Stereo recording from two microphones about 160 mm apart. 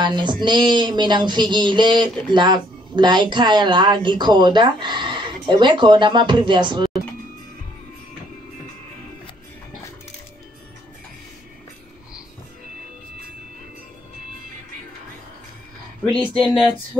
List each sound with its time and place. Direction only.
0.0 s speech: 30° right (ahead or behind)
16.3 s speech: 5° right (ahead or behind)